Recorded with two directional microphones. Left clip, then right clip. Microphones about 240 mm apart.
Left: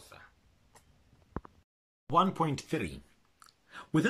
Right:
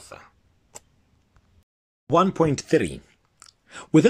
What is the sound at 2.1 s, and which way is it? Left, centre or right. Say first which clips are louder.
Speech: right 8 dB; right.